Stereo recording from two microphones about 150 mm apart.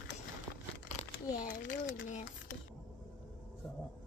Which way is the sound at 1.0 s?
60° left (ahead or behind).